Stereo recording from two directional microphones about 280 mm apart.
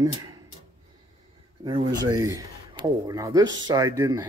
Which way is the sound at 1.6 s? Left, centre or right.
Centre.